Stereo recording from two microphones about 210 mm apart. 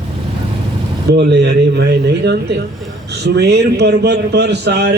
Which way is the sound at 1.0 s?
55° right (ahead or behind).